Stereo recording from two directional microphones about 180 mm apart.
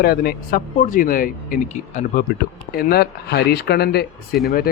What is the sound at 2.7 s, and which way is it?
Speech, 60° left (ahead or behind).